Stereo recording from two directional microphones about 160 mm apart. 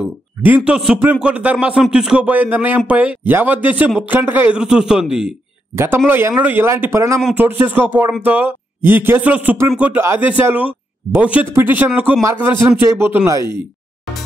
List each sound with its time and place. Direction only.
0.0 s a man's voice: 10° right (ahead or behind)